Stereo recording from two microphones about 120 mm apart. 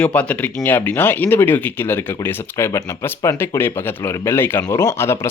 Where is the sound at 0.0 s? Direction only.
10° left (ahead or behind).